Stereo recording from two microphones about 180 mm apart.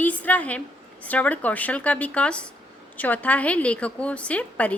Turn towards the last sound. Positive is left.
turn(degrees=10)  # may be behind; listen again after turning